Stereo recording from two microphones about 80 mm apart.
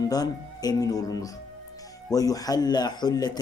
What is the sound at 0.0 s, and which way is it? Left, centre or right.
Speech, left.